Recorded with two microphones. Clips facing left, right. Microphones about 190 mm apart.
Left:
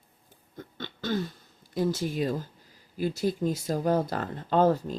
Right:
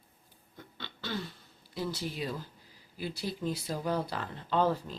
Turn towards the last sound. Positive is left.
turn(degrees=45)  # may be behind; listen again after turning